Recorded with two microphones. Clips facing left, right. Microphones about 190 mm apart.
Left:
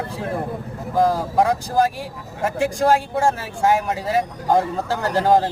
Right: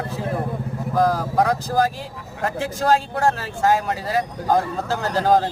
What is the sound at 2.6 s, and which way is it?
Speech, 10° left (ahead or behind).